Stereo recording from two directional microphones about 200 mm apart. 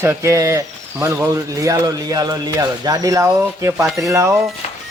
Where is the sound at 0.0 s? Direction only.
15° right (ahead or behind).